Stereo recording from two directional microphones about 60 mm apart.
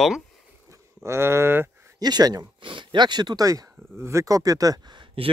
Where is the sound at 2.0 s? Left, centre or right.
Right.